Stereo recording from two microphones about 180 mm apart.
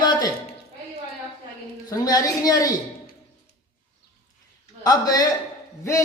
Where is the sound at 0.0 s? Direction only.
20° left (ahead or behind).